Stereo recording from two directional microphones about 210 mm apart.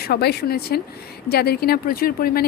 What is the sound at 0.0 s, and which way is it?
A woman's voice, 50° left (ahead or behind).